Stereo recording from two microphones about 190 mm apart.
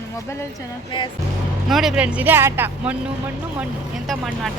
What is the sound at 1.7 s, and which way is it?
A woman's voice, centre (ahead or behind).